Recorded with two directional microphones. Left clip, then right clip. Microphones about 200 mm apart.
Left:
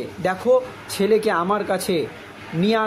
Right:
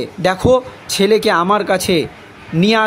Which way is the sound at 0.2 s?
50° right (ahead or behind).